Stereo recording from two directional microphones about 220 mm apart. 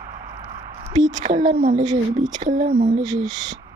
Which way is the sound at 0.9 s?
15° right (ahead or behind).